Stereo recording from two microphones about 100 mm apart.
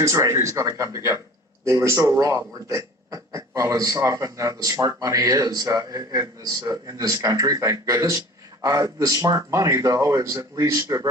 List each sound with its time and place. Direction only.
0.0 s speech: 30° right (ahead or behind)